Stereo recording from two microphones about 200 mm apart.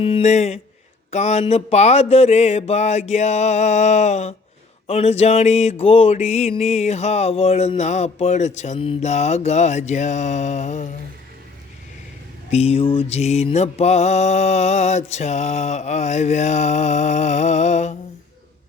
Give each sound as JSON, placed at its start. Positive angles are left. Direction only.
{"t": 0.0, "sound": "mantra", "side_deg": 30}
{"t": 12.5, "sound": "mantra", "side_deg": 30}